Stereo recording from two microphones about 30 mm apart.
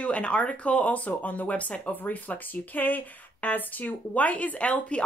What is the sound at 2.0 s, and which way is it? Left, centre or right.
Speech, left.